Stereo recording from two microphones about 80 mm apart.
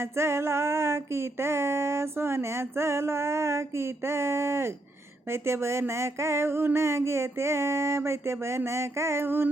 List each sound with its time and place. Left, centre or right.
0.0 s music: right